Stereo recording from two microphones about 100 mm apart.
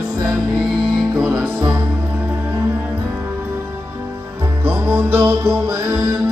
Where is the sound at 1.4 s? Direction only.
10° right (ahead or behind).